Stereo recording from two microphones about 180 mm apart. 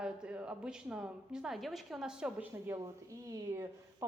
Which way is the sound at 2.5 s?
15° right (ahead or behind).